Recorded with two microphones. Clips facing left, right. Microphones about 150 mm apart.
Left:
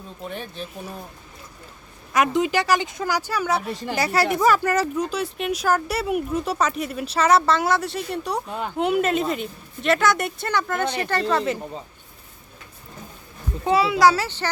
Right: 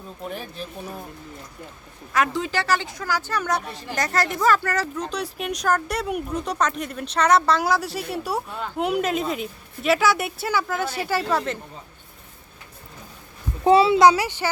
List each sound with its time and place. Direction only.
0.2 s speech: centre (ahead or behind)
2.1 s speech: 15° left (ahead or behind)
5.0 s speech: centre (ahead or behind)
13.7 s a child's voice: 30° right (ahead or behind); by 14.5 s 10° right (ahead or behind)